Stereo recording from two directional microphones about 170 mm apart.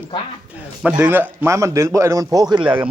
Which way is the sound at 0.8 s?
5° right (ahead or behind).